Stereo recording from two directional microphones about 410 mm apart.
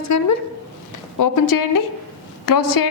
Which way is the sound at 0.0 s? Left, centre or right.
Left.